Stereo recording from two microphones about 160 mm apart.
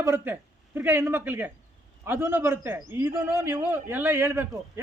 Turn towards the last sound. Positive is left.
turn(degrees=-15)  # may be behind; listen again after turning